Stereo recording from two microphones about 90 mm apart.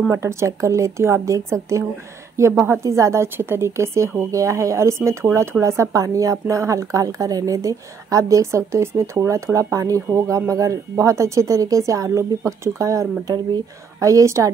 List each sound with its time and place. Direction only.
0.1 s speech: 30° right (ahead or behind)